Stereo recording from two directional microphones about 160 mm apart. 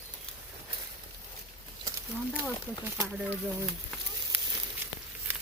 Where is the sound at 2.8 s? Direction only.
10° right (ahead or behind).